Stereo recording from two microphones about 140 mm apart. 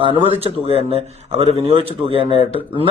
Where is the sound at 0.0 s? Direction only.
40° right (ahead or behind).